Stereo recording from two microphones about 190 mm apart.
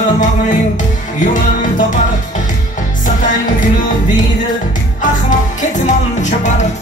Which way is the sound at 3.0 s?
45° left (ahead or behind).